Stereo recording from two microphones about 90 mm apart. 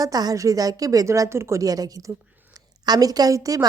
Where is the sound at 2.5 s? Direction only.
45° right (ahead or behind).